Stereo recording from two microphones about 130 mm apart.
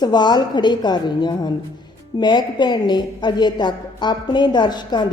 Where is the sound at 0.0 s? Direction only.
35° left (ahead or behind).